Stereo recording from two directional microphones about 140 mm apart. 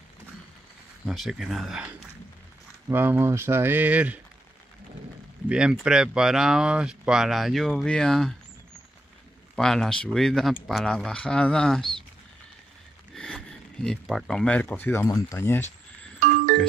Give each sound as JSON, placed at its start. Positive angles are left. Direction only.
{"t": 1.0, "sound": "speech", "side_deg": 0}
{"t": 5.5, "sound": "speech", "side_deg": -5}
{"t": 9.6, "sound": "speech", "side_deg": 5}
{"t": 13.1, "sound": "speech", "side_deg": 5}